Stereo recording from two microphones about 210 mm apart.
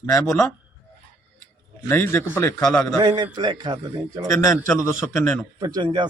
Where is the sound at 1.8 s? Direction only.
10° left (ahead or behind).